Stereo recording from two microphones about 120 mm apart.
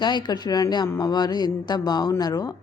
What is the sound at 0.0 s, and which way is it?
Speech, 35° left (ahead or behind).